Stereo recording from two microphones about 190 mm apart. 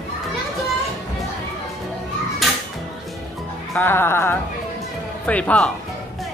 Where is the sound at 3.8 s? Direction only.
10° left (ahead or behind).